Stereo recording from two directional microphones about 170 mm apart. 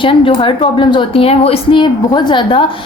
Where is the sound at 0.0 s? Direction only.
30° left (ahead or behind).